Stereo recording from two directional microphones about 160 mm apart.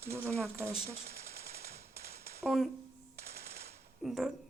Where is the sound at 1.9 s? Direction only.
70° right (ahead or behind).